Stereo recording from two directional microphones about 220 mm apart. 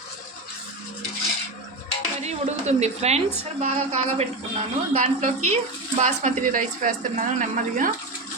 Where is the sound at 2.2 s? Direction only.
30° right (ahead or behind).